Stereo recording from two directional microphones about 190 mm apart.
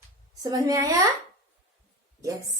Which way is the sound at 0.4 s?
15° right (ahead or behind).